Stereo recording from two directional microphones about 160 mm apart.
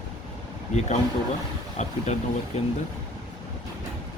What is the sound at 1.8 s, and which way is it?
Speech, 45° left (ahead or behind).